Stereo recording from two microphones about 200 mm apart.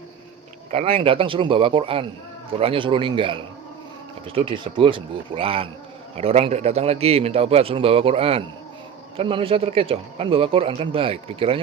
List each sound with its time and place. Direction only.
0.7 s speech: 30° right (ahead or behind)